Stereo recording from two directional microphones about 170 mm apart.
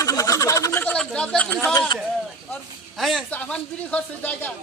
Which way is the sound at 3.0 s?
Centre (ahead or behind).